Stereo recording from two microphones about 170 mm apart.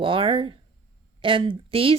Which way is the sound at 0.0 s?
30° right (ahead or behind).